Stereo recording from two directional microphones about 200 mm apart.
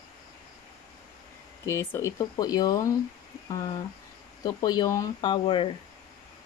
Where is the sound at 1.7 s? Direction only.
10° left (ahead or behind).